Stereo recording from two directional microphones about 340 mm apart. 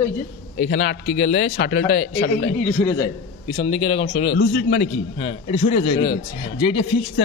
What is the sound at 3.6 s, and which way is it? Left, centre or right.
Speech, centre.